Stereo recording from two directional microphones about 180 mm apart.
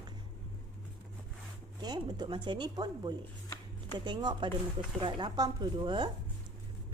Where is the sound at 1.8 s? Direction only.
25° right (ahead or behind).